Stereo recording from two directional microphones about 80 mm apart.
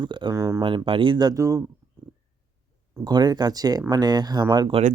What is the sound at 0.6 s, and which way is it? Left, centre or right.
Speech, right.